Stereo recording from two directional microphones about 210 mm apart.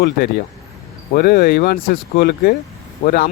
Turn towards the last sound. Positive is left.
turn(degrees=45)  # may be behind; listen again after turning